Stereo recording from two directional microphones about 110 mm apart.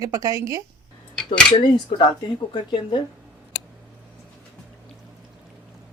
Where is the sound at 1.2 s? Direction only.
5° left (ahead or behind).